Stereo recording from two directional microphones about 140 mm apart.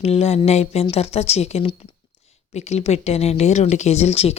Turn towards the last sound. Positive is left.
turn(degrees=45)  # may be behind; listen again after turning